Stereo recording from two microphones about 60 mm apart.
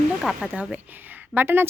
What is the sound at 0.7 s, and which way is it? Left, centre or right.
Speech, right.